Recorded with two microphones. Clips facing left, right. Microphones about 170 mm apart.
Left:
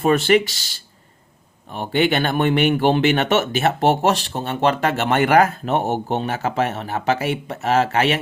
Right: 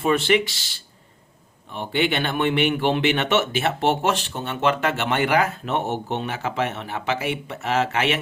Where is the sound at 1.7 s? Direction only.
45° left (ahead or behind).